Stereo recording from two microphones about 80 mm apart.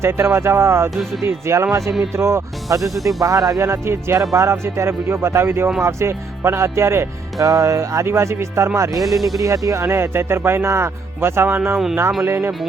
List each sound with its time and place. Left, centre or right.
0.0 s speech: right
2.9 s speech: centre
3.2 s speech: right
7.3 s speech: right
9.0 s speech: centre
9.4 s speech: right
9.8 s speech: right